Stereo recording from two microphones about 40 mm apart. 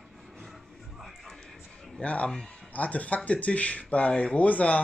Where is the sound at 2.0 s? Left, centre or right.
Left.